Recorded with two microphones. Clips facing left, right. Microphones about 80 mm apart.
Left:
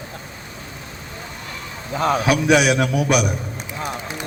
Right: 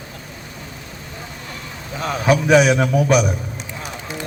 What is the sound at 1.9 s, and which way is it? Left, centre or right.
Speech, left.